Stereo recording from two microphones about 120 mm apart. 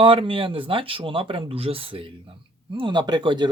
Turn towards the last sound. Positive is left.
turn(degrees=-40)  # may be behind; listen again after turning